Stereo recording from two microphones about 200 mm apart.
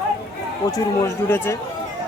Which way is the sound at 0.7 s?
15° left (ahead or behind).